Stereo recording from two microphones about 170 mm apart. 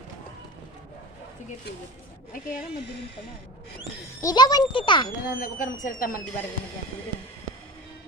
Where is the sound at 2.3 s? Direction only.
55° left (ahead or behind).